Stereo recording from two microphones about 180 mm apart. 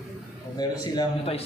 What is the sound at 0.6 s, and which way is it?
Speech, 20° left (ahead or behind).